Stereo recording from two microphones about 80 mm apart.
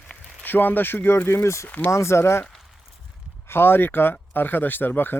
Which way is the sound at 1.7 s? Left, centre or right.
Centre.